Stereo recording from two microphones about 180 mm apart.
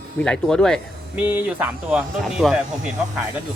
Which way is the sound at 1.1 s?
10° right (ahead or behind).